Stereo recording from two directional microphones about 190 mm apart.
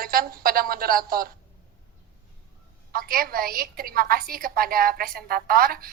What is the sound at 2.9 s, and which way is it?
A woman's voice, 50° right (ahead or behind).